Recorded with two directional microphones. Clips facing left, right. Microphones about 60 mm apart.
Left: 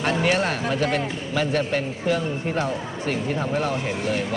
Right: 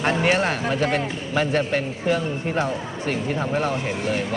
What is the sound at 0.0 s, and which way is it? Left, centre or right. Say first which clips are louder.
A man's voice: right 1 dB; right.